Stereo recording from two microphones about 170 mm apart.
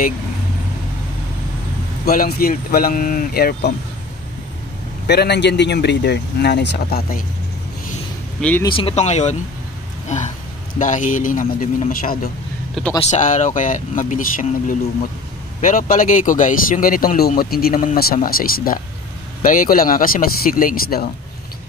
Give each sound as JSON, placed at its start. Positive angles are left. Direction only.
{"t": 2.0, "sound": "speech", "side_deg": 60}
{"t": 5.0, "sound": "speech", "side_deg": 75}
{"t": 8.4, "sound": "speech", "side_deg": 10}
{"t": 8.7, "sound": "speech", "side_deg": 35}
{"t": 12.8, "sound": "speech", "side_deg": 0}
{"t": 13.1, "sound": "speech", "side_deg": 45}